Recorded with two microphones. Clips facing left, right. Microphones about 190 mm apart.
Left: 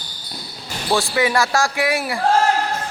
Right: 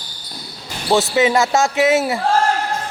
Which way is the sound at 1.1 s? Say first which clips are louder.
Right 3 dB; 20° right (ahead or behind).